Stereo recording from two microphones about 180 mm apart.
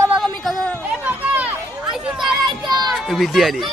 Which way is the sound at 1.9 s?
Centre (ahead or behind).